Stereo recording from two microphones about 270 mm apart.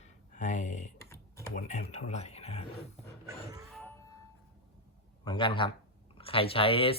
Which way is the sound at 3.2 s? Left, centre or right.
Centre.